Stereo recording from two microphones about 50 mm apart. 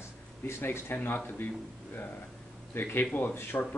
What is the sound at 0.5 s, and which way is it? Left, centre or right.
Speech, left.